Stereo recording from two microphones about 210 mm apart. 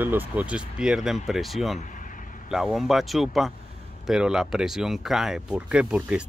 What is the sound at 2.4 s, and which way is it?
Speech, centre (ahead or behind).